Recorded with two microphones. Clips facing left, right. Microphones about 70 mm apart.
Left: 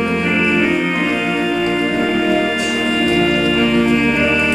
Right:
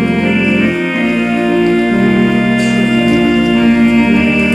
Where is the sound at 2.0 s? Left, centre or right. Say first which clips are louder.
Right 6 dB; right.